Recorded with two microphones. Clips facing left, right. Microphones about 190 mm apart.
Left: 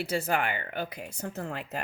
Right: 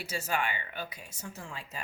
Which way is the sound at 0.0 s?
55° left (ahead or behind).